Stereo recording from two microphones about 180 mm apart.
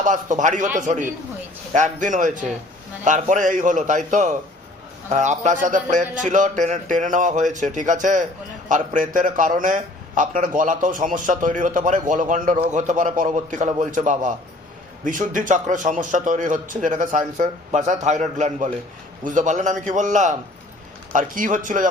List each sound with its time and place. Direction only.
0.0 s a man's voice: 45° right (ahead or behind)